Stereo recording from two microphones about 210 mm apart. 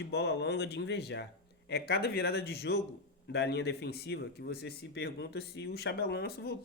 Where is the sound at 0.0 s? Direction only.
55° left (ahead or behind).